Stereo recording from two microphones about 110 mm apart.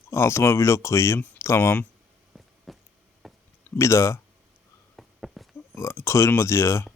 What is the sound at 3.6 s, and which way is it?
Speech, 25° left (ahead or behind).